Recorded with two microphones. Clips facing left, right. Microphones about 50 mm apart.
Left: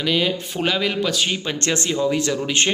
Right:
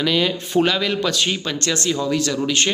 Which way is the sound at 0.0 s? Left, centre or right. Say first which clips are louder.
Right 1 dB; centre.